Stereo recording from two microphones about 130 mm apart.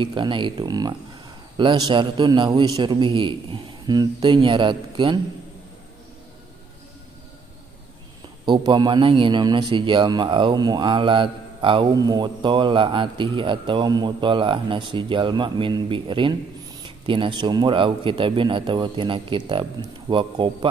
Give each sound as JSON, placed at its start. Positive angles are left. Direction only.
{"t": 0.0, "sound": "a man's voice", "side_deg": -40}
{"t": 8.5, "sound": "a man's voice", "side_deg": -35}